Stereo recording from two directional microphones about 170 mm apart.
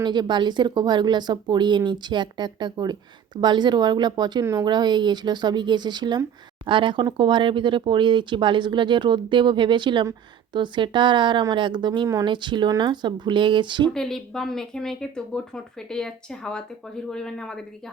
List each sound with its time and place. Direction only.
0.0 s speech: 25° right (ahead or behind)
13.9 s speech: 5° left (ahead or behind)